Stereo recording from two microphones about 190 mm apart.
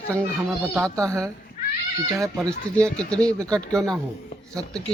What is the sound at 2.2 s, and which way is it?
Speech, 5° left (ahead or behind).